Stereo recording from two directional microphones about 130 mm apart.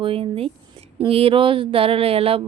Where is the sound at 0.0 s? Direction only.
45° right (ahead or behind).